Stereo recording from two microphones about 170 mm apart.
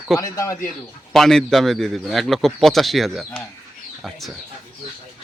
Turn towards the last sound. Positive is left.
turn(degrees=0)  # may be behind; listen again after turning